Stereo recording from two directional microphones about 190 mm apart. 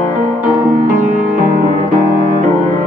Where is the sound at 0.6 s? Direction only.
45° right (ahead or behind).